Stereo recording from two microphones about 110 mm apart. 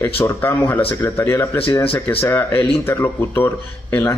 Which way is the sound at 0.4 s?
20° left (ahead or behind).